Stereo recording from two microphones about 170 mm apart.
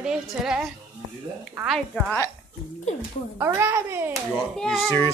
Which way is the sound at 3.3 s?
15° right (ahead or behind).